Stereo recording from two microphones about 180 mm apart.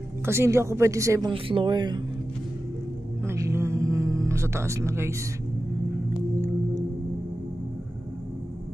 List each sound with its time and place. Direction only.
0.2 s speech: 15° right (ahead or behind)
1.3 s speech: 30° right (ahead or behind)
3.3 s music: 15° right (ahead or behind)